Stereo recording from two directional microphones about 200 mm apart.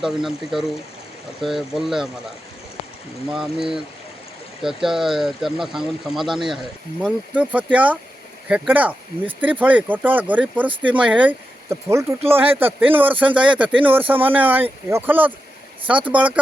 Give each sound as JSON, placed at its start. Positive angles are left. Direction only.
{"t": 0.0, "sound": "speech", "side_deg": 0}
{"t": 3.2, "sound": "speech", "side_deg": 0}